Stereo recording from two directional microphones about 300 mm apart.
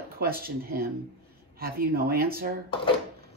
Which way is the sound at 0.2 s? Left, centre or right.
Right.